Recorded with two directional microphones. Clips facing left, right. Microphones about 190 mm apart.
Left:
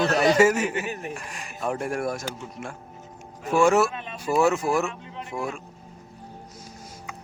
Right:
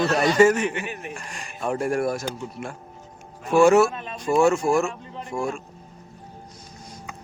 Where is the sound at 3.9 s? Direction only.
40° right (ahead or behind).